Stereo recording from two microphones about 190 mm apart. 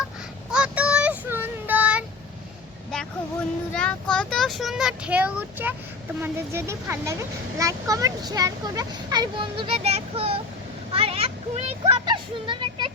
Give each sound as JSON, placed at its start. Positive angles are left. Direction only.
{"t": 0.5, "sound": "child singing", "side_deg": -5}
{"t": 3.8, "sound": "a child's voice", "side_deg": 5}